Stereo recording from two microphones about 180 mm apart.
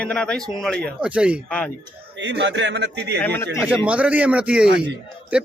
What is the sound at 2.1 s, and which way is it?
A man's voice, 75° right (ahead or behind).